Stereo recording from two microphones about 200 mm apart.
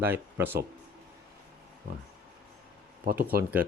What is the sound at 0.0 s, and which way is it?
Speech, 10° right (ahead or behind).